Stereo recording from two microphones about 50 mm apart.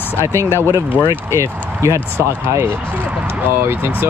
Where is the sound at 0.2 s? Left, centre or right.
Right.